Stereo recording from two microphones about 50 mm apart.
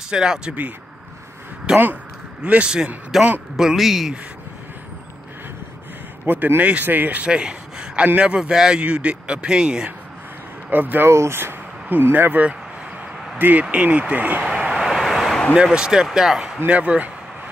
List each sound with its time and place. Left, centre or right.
0.1 s speech: centre
1.7 s speech: centre
6.2 s speech: right
7.2 s a sound: centre
8.4 s speech: centre
10.7 s speech: right
11.1 s speech: right
11.9 s speech: right
13.4 s speech: right
14.4 s vehicle: centre
14.7 s vehicle: centre
15.5 s speech: centre
16.6 s speech: right